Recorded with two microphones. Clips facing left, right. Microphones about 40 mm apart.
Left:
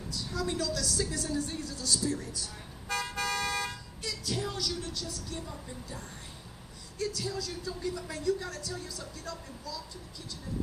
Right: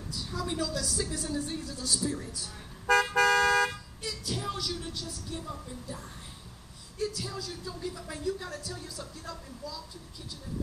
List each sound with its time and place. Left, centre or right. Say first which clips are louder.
0.1 s speech: left 1 dB; centre
3.2 s toot: right 8 dB; right
3.7 s speech: even; centre